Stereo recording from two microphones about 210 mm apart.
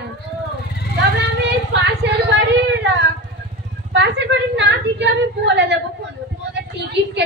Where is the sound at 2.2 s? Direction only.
55° right (ahead or behind).